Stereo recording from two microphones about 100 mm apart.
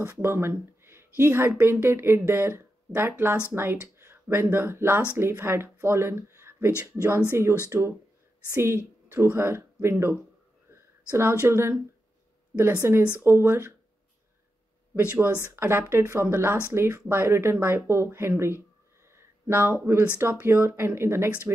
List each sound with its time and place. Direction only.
0.0 s speech: 25° right (ahead or behind)
10.7 s a sound: 25° right (ahead or behind)
11.4 s speech: 25° right (ahead or behind)
15.0 s speech: 20° right (ahead or behind)
19.1 s a sound: 20° right (ahead or behind)
20.2 s speech: 25° right (ahead or behind)